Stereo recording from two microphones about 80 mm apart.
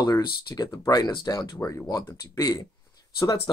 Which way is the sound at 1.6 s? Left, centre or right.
Left.